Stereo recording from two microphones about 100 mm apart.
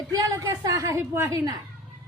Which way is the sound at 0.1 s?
35° right (ahead or behind).